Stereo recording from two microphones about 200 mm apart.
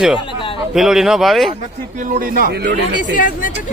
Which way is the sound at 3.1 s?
40° left (ahead or behind).